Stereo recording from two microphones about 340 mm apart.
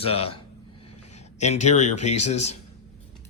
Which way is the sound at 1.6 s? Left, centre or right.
Centre.